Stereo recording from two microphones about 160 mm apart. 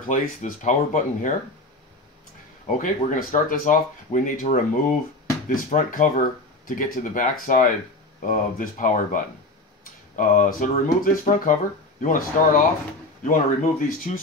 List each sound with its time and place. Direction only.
0.1 s speech: 50° left (ahead or behind)
2.6 s speech: 50° left (ahead or behind)